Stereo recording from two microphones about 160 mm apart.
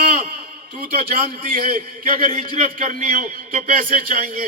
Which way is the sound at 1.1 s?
60° right (ahead or behind).